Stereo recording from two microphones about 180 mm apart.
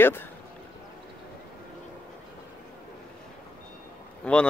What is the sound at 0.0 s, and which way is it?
Speech, 10° left (ahead or behind).